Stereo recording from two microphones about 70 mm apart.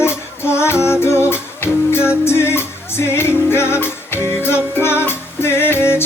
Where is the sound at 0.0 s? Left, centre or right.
Left.